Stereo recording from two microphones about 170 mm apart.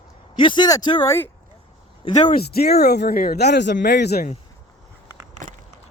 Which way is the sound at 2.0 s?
40° left (ahead or behind).